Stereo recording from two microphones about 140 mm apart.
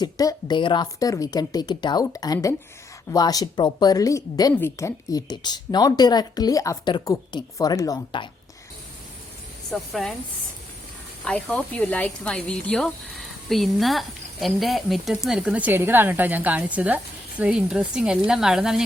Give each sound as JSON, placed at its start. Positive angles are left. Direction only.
{"t": 0.0, "sound": "speech", "side_deg": 25}
{"t": 9.7, "sound": "a woman's voice", "side_deg": 0}
{"t": 11.3, "sound": "a woman's voice", "side_deg": 10}